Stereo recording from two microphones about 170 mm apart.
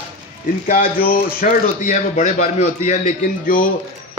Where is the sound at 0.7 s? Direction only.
60° left (ahead or behind).